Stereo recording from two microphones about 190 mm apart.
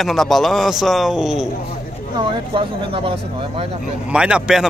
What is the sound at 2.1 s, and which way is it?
Speech, 30° right (ahead or behind).